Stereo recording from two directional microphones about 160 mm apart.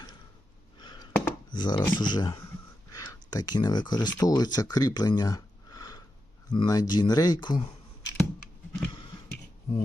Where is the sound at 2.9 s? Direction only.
20° left (ahead or behind).